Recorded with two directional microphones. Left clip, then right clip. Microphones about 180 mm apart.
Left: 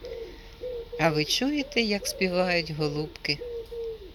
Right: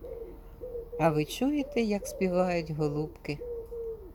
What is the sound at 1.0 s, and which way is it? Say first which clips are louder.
Speech: left 3 dB; 10° right (ahead or behind).